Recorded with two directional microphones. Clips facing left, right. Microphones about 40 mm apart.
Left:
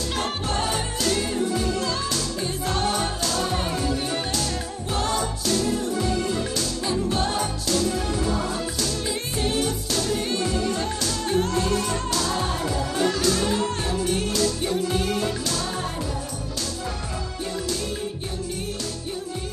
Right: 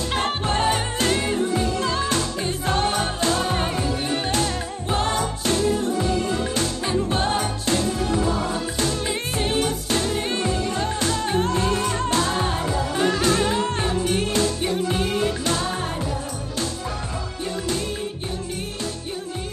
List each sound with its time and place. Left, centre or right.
0.0 s music: right